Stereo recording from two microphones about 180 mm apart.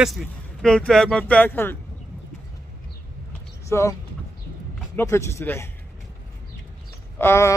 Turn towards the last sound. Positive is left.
turn(degrees=15)  # may be behind; listen again after turning